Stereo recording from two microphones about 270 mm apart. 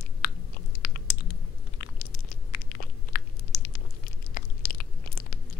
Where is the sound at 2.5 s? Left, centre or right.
Left.